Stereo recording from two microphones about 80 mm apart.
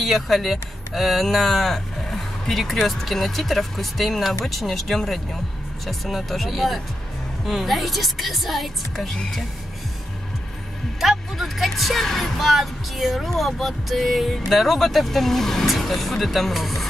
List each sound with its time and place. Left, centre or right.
0.0 s speech: centre
11.0 s speech: centre